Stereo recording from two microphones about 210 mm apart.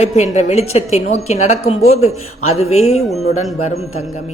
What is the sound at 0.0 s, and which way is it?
A woman's voice, 35° left (ahead or behind).